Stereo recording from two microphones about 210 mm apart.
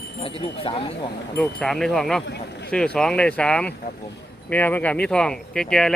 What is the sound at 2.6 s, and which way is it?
Speech, 5° left (ahead or behind).